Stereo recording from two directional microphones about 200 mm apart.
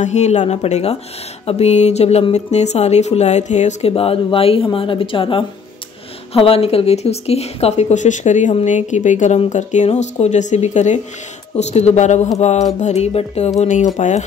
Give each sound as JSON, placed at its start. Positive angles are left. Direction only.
{"t": 0.0, "sound": "speech", "side_deg": 35}